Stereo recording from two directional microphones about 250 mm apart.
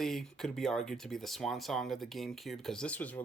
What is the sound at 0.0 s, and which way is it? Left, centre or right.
Speech, centre.